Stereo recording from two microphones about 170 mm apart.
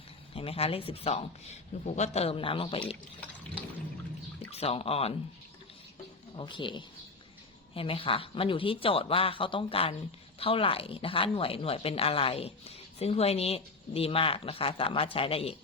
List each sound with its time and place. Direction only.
0.3 s a woman's voice: 35° left (ahead or behind)
4.5 s a woman's voice: 35° left (ahead or behind)
6.3 s a woman's voice: 30° left (ahead or behind)